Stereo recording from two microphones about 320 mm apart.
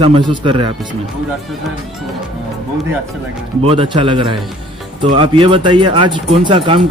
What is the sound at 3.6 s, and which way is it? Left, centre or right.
A man's voice, centre.